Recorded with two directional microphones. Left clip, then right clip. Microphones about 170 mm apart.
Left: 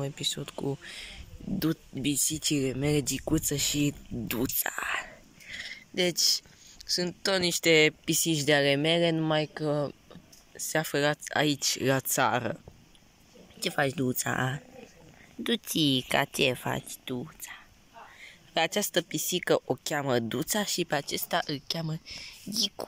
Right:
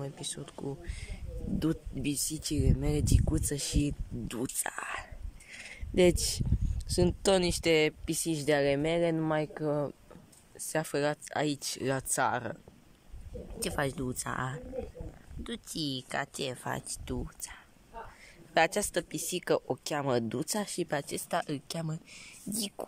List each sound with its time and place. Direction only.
0.0 s speech: centre (ahead or behind)
5.7 s speech: 20° right (ahead or behind); by 12.5 s 5° left (ahead or behind)
13.6 s speech: centre (ahead or behind)